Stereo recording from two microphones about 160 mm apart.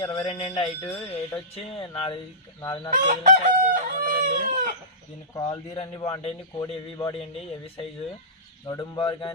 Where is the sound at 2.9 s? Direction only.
55° right (ahead or behind).